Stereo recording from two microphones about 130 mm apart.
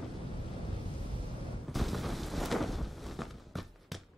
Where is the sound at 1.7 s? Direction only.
Centre (ahead or behind).